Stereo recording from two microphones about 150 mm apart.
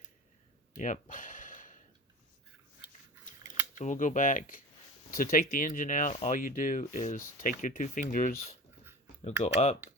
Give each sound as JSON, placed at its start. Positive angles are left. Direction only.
{"t": 0.8, "sound": "a sound", "side_deg": 55}
{"t": 3.8, "sound": "speech", "side_deg": 55}
{"t": 9.4, "sound": "speech", "side_deg": 45}